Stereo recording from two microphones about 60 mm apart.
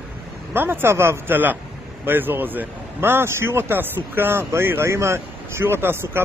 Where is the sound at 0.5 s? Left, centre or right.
Right.